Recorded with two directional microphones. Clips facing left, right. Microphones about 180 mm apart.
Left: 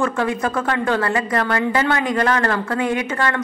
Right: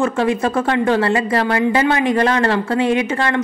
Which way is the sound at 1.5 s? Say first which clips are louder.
Right 3 dB; 15° right (ahead or behind).